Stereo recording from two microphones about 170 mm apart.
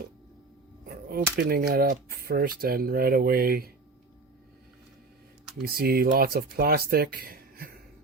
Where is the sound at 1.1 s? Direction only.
60° right (ahead or behind).